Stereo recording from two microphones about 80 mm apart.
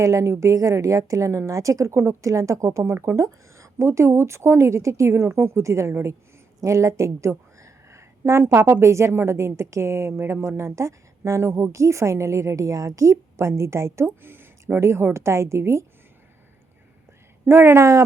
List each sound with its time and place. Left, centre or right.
0.0 s a woman's voice: right
17.4 s speech: right